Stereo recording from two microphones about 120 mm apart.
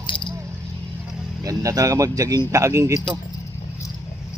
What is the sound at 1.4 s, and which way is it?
Speech, 30° right (ahead or behind).